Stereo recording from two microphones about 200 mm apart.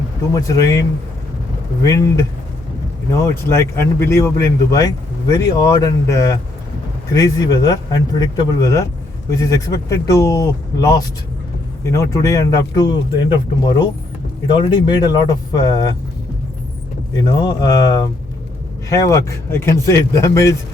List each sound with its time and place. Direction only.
0.3 s a man's voice: 15° left (ahead or behind)
3.1 s a man's voice: 15° left (ahead or behind)
17.2 s a man's voice: 20° left (ahead or behind)